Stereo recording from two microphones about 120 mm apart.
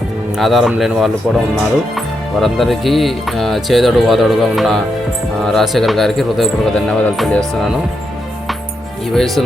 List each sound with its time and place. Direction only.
0.3 s speech: centre (ahead or behind)
9.1 s speech: centre (ahead or behind)